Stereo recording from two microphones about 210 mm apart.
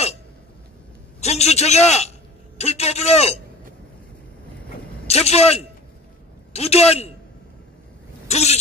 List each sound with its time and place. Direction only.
1.2 s a man's voice: 30° left (ahead or behind)
5.0 s a man's voice: 30° left (ahead or behind)
8.3 s speech: 30° left (ahead or behind)